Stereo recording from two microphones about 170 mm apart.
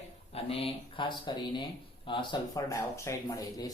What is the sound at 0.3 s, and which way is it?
Speech, 35° left (ahead or behind).